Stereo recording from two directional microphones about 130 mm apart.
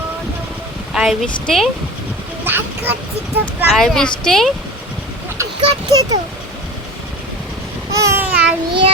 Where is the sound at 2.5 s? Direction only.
15° right (ahead or behind).